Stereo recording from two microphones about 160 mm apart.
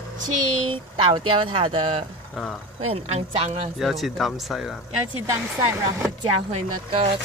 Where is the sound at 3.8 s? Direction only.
Centre (ahead or behind).